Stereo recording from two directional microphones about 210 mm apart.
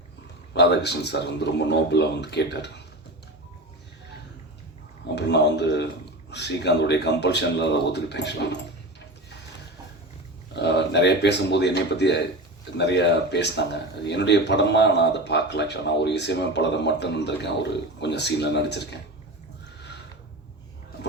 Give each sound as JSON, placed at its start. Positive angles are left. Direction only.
{"t": 0.5, "sound": "speech", "side_deg": 55}
{"t": 5.1, "sound": "speech", "side_deg": 55}
{"t": 10.5, "sound": "speech", "side_deg": 55}